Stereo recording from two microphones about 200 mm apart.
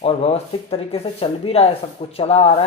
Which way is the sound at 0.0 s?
30° left (ahead or behind).